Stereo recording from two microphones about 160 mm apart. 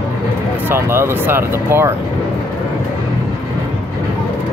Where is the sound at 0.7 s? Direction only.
15° right (ahead or behind).